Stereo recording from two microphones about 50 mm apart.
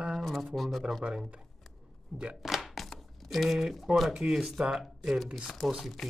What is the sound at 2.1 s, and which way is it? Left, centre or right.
Speech, centre.